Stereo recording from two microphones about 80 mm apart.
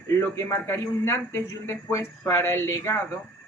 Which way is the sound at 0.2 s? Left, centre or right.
Left.